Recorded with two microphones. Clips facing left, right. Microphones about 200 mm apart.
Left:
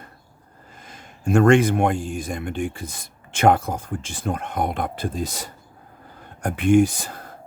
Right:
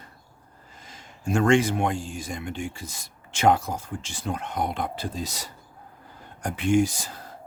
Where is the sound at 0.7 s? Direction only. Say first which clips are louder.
Left 4 dB; 55° left (ahead or behind).